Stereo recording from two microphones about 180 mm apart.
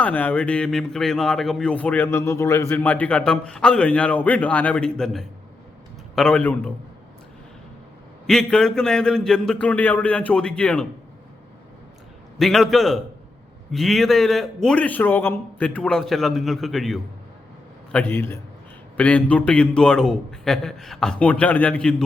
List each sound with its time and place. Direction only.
0.0 s a man's voice: 10° left (ahead or behind)
8.3 s a man's voice: 5° left (ahead or behind)
12.4 s a man's voice: centre (ahead or behind)